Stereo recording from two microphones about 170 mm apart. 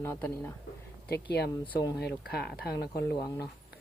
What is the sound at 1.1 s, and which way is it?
Speech, 70° left (ahead or behind).